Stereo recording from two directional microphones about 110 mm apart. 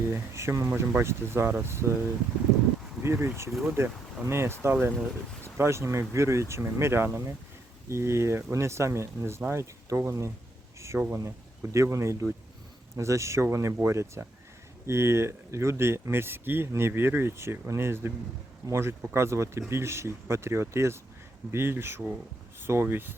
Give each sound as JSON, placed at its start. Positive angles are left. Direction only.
{"t": 0.1, "sound": "speech", "side_deg": -25}
{"t": 3.5, "sound": "speech", "side_deg": -10}
{"t": 4.3, "sound": "speech", "side_deg": -20}